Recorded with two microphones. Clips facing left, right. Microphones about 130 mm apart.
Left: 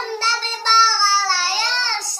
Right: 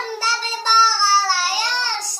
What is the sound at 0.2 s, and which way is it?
Child singing, 5° right (ahead or behind).